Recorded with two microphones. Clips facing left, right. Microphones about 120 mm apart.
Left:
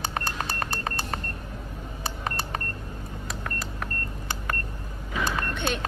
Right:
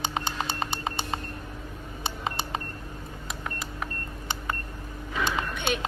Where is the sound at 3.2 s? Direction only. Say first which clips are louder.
Left 1 dB; 15° right (ahead or behind).